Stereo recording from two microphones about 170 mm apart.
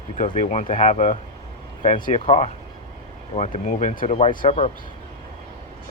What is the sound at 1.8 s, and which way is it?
Speech, 30° left (ahead or behind).